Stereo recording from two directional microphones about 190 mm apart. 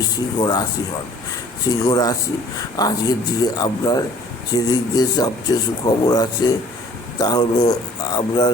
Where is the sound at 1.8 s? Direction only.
20° left (ahead or behind).